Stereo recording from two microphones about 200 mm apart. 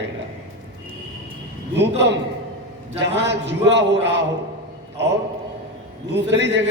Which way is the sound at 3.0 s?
60° right (ahead or behind).